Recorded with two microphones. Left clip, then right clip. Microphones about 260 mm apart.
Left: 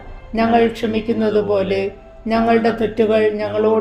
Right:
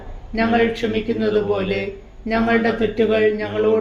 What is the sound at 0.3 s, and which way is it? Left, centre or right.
Speech, left.